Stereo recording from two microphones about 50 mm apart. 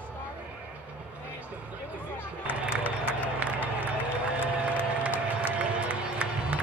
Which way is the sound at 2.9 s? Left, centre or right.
Left.